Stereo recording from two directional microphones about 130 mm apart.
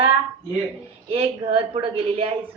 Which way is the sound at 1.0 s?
50° right (ahead or behind).